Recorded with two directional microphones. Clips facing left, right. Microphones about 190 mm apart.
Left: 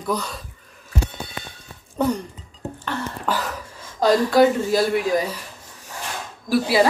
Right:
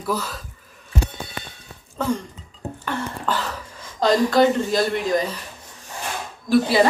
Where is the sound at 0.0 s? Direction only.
5° right (ahead or behind).